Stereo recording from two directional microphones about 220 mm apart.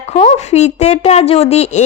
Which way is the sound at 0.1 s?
30° left (ahead or behind).